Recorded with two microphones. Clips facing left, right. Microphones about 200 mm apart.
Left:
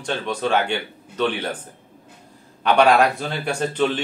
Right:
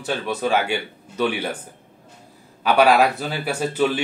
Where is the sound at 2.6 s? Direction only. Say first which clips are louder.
Even; 5° right (ahead or behind).